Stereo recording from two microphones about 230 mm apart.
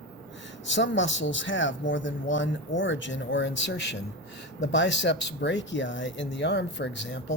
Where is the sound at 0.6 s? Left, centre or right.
Left.